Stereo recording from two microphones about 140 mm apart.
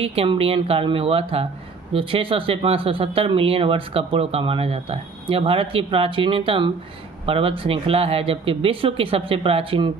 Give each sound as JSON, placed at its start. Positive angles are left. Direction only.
{"t": 0.0, "sound": "speech", "side_deg": -45}